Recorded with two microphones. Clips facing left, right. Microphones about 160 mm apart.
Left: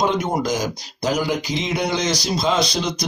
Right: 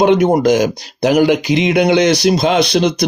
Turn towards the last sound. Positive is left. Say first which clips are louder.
# right 9 dB
turn(degrees=-65)  # may be behind; listen again after turning